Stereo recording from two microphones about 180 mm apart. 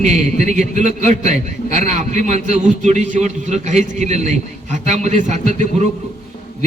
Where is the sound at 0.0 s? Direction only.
40° right (ahead or behind).